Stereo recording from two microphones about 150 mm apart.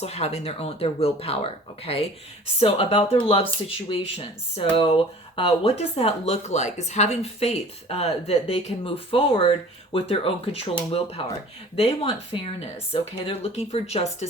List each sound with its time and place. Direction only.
0.0 s speech: 45° left (ahead or behind)